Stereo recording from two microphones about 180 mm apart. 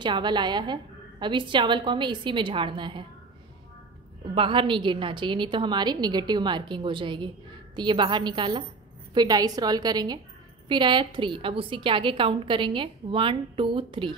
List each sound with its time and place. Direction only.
0.0 s a woman's voice: 25° right (ahead or behind)
4.4 s a woman's voice: 30° right (ahead or behind)